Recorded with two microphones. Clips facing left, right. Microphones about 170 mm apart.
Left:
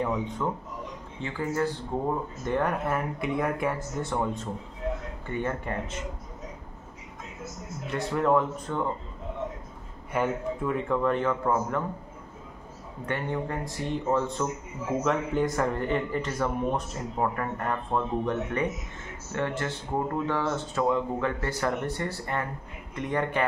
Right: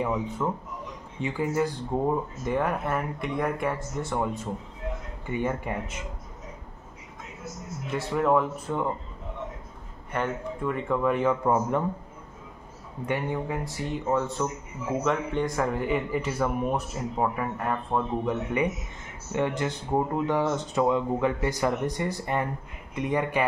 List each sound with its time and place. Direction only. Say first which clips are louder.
0.0 s speech: right 1 dB; 5° right (ahead or behind)
7.9 s speech: right 1 dB; 5° right (ahead or behind)
10.1 s speech: left 2 dB; 5° left (ahead or behind); by 11.8 s 15° right (ahead or behind)
13.0 s speech: right 2 dB; 10° right (ahead or behind)